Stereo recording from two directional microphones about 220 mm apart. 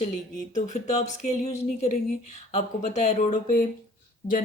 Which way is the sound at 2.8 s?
30° left (ahead or behind).